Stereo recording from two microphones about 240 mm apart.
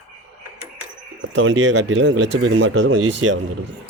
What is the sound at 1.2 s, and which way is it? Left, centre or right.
Speech, right.